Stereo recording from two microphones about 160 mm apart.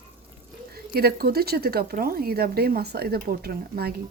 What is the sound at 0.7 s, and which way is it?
Speech, 75° right (ahead or behind).